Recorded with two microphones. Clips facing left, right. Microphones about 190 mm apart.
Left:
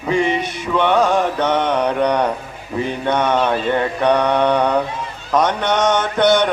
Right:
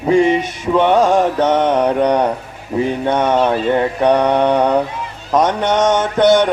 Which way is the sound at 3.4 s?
15° right (ahead or behind).